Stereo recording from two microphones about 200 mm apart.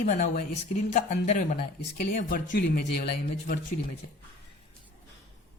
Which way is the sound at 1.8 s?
45° left (ahead or behind).